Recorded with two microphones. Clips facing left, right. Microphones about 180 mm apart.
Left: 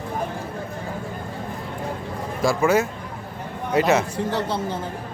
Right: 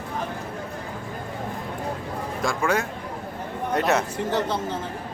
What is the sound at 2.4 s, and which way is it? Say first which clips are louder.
Speech: left 6 dB; 5° left (ahead or behind).